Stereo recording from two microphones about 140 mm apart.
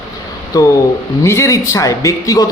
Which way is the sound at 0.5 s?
30° left (ahead or behind).